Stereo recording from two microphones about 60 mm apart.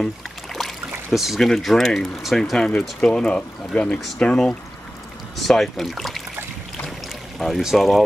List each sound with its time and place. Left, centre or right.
0.6 s a sound: centre
1.5 s speech: centre
2.5 s speech: centre
5.5 s speech: centre
7.3 s speech: centre